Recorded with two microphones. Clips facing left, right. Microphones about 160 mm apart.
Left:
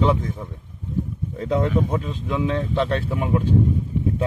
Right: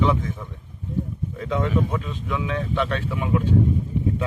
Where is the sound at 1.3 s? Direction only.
35° left (ahead or behind).